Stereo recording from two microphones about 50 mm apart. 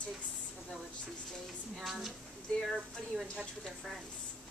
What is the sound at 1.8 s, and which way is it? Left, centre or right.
Speech, centre.